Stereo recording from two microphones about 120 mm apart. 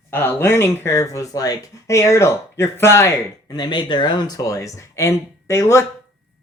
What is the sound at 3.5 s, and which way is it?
Speech, 40° left (ahead or behind).